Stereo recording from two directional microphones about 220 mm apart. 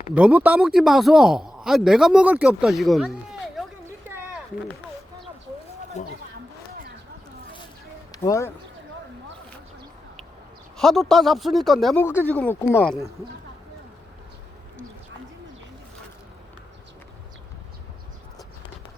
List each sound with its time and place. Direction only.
0.1 s speech: 5° right (ahead or behind)
6.0 s speech: 30° left (ahead or behind)
8.1 s speech: 15° left (ahead or behind)
10.8 s speech: centre (ahead or behind)